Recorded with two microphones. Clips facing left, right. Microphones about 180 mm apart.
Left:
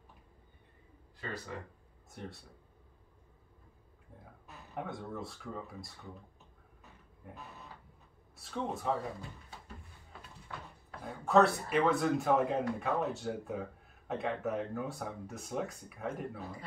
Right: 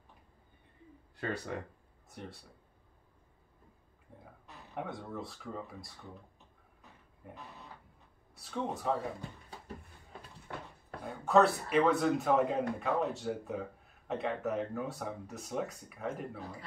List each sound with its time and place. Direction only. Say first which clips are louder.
1.1 s speech: right 5 dB; 65° right (ahead or behind)
2.0 s speech: left 1 dB; centre (ahead or behind)
4.5 s speech: even; centre (ahead or behind)
8.4 s speech: right 1 dB; centre (ahead or behind)
11.0 s speech: even; centre (ahead or behind)